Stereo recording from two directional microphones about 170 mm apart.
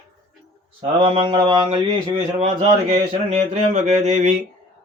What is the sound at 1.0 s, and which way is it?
A man's voice, 30° right (ahead or behind).